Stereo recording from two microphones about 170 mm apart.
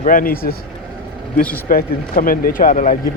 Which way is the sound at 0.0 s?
55° left (ahead or behind).